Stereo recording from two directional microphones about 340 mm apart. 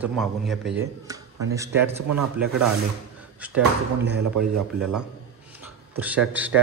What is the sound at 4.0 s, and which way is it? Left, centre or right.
Speech, right.